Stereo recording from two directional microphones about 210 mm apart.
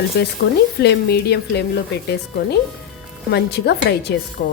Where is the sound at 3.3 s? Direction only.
50° left (ahead or behind).